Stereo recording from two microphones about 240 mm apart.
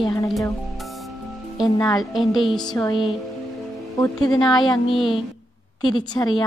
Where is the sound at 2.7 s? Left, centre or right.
Centre.